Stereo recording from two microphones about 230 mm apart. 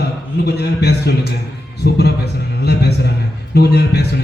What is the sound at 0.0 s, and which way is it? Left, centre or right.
A man's voice, left.